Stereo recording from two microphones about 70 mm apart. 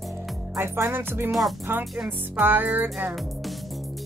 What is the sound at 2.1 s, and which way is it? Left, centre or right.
Music, right.